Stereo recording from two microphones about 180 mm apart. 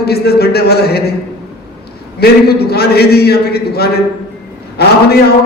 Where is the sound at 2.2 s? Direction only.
60° left (ahead or behind).